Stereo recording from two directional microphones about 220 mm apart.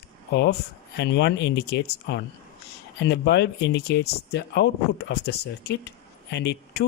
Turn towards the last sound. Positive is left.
turn(degrees=50)  # may be behind; listen again after turning